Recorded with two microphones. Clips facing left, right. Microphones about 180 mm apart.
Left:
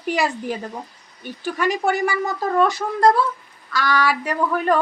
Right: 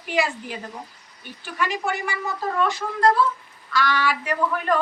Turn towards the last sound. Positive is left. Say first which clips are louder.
# left 3 dB
turn(degrees=40)  # may be behind; listen again after turning